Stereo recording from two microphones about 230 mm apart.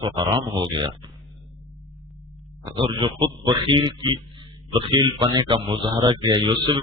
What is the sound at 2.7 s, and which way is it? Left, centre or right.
Speech, right.